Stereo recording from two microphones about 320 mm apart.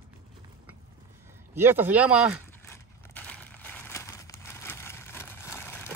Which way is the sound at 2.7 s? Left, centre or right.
Centre.